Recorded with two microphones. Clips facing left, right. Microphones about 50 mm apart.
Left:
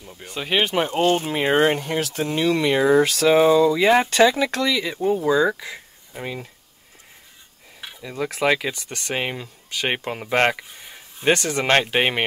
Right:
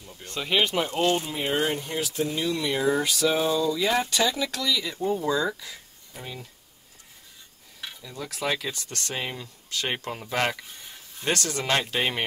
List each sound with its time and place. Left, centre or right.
0.0 s speech: centre
0.4 s speech: left
1.3 s speech: left
6.2 s speech: left
8.0 s speech: left
9.1 s speech: left
10.5 s a sound: centre
11.3 s speech: left
11.6 s speech: left